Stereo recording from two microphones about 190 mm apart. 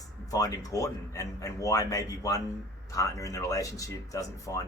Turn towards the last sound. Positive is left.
turn(degrees=15)  # may be behind; listen again after turning